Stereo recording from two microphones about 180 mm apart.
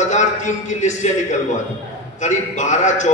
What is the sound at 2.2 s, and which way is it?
Speech, 40° left (ahead or behind).